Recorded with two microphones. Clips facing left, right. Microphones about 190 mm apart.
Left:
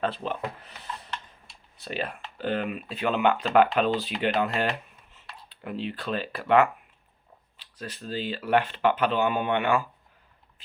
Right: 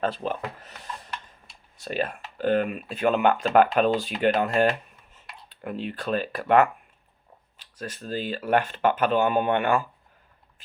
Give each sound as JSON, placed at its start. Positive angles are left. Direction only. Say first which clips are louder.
{"t": 0.0, "sound": "speech", "louder": "right 2 dB", "side_deg": -45}
{"t": 1.8, "sound": "speech", "louder": "right 4 dB", "side_deg": -45}